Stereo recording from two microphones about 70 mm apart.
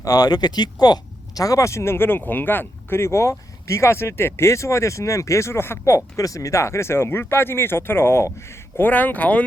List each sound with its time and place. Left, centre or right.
0.0 s speech: left
1.4 s speech: left
6.1 s speech: left
8.8 s speech: left